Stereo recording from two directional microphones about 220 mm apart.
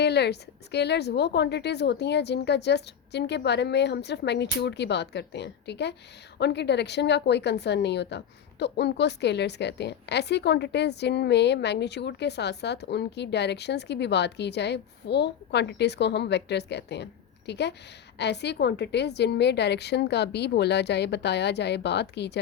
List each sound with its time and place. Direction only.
0.0 s a woman's voice: 50° left (ahead or behind)